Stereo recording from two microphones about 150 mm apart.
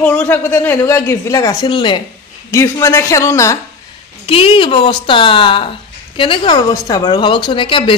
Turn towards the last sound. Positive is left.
turn(degrees=35)  # may be behind; listen again after turning